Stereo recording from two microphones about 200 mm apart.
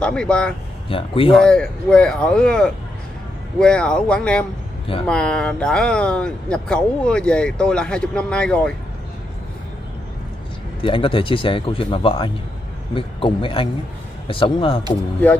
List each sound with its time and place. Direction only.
0.0 s speech: 5° left (ahead or behind)
0.8 s speech: 25° left (ahead or behind)
1.4 s speech: 5° left (ahead or behind)
10.8 s speech: 25° left (ahead or behind)